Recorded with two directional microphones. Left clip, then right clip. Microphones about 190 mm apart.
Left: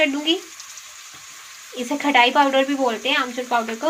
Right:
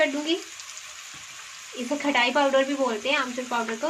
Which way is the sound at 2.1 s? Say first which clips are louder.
Left 6 dB; 55° left (ahead or behind).